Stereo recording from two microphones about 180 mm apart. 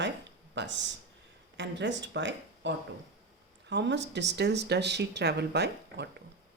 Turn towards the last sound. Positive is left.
turn(degrees=-65)  # may be behind; listen again after turning